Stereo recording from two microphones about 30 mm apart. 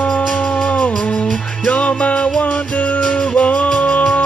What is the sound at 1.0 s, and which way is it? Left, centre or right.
Music, left.